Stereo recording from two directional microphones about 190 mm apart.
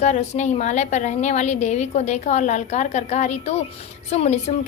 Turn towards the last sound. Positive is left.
turn(degrees=35)  # may be behind; listen again after turning